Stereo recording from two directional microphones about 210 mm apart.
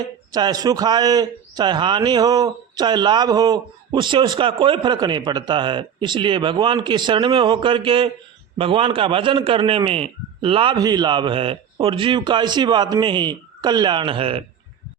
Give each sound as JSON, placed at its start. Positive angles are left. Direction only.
{"t": 0.3, "sound": "a man's voice", "side_deg": -20}